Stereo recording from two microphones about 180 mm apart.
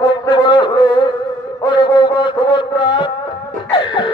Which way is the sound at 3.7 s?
30° left (ahead or behind).